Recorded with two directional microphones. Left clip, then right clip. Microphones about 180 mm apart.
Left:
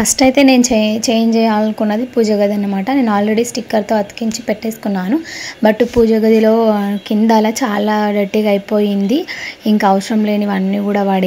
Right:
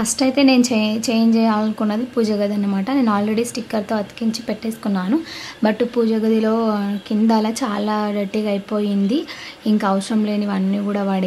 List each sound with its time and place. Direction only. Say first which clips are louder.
0.0 s speech: left 6 dB; 20° left (ahead or behind)